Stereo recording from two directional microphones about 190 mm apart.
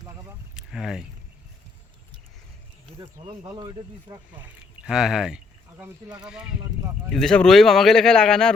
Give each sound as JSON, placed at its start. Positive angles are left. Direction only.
{"t": 0.5, "sound": "vehicle", "side_deg": 0}
{"t": 3.0, "sound": "speech", "side_deg": -20}
{"t": 4.6, "sound": "speech", "side_deg": -5}
{"t": 7.1, "sound": "speech", "side_deg": 0}